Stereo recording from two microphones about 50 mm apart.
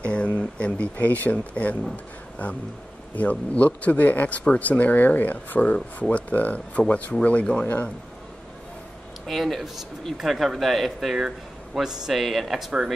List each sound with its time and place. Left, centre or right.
0.0 s a sound: left
0.9 s speech: left
9.3 s speech: centre